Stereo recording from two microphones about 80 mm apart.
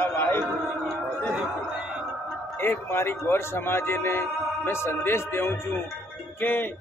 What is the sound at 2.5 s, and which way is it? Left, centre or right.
Speech, left.